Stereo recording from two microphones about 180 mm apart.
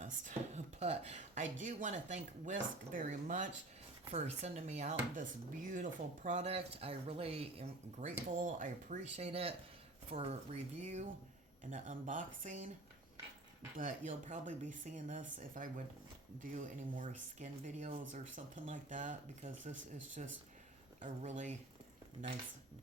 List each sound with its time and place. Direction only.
0.0 s a sound: 40° right (ahead or behind)
1.6 s speech: 40° right (ahead or behind)
13.7 s speech: 45° right (ahead or behind)